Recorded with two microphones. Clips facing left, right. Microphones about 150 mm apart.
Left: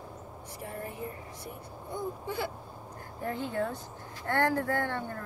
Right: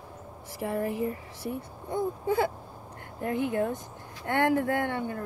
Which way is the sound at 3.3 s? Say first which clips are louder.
Right 6 dB; 15° right (ahead or behind).